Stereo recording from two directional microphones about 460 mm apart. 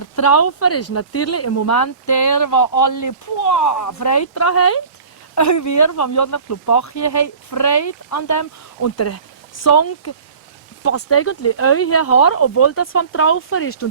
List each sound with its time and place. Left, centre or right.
0.2 s speech: left